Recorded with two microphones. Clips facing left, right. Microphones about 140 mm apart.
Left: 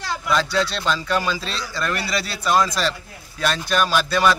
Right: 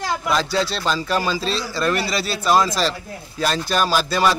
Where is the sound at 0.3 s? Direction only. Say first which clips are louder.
Left 1 dB; 30° right (ahead or behind).